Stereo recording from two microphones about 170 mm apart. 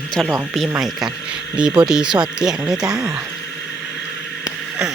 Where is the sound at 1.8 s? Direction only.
5° right (ahead or behind).